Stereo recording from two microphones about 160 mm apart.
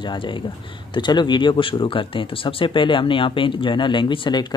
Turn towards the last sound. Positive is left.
turn(degrees=25)  # may be behind; listen again after turning